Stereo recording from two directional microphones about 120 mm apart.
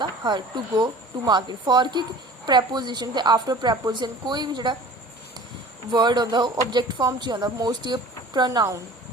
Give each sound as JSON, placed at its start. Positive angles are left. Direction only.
{"t": 0.0, "sound": "speech", "side_deg": -40}
{"t": 5.9, "sound": "speech", "side_deg": -40}